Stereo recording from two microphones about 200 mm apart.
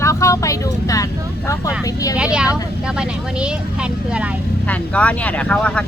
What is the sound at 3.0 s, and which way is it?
Speech, 5° right (ahead or behind).